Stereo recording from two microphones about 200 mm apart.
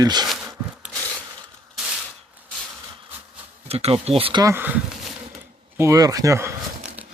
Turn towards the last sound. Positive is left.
turn(degrees=-10)  # may be behind; listen again after turning